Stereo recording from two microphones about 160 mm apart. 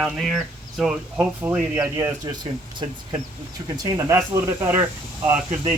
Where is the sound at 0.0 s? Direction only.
Centre (ahead or behind); by 2.3 s 20° right (ahead or behind).